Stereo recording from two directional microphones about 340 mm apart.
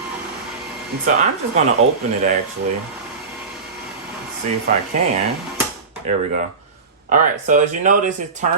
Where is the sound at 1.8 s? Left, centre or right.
Centre.